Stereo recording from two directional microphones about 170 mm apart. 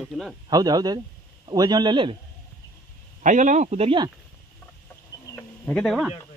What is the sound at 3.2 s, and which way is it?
Speech, 50° right (ahead or behind).